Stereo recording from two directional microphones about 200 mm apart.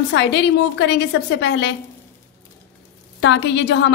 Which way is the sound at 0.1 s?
60° left (ahead or behind).